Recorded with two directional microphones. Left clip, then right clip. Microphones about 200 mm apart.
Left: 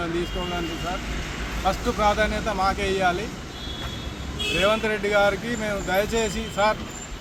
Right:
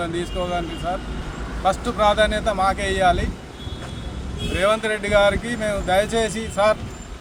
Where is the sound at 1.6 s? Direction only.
15° right (ahead or behind).